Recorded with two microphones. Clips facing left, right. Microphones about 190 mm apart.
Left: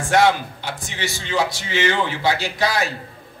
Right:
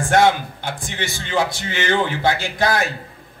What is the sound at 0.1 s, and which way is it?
A man's voice, 55° right (ahead or behind).